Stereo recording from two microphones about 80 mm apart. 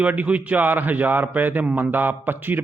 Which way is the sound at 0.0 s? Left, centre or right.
Centre.